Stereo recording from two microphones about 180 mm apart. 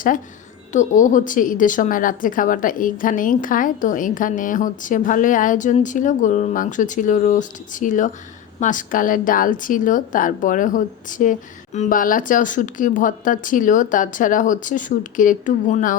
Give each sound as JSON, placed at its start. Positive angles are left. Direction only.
{"t": 0.7, "sound": "speech", "side_deg": 45}